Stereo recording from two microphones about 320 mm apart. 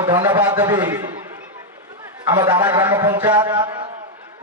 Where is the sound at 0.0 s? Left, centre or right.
Centre.